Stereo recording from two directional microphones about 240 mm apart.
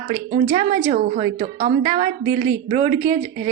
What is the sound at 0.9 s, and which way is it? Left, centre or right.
A woman's voice, right.